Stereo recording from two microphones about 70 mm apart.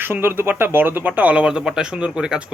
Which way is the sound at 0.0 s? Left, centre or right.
Right.